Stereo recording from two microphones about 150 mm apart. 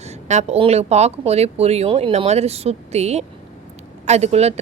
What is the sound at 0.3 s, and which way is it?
Speech, 50° right (ahead or behind).